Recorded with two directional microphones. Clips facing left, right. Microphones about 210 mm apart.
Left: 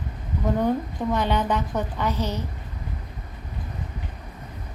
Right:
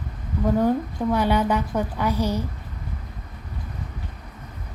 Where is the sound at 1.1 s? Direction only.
10° right (ahead or behind).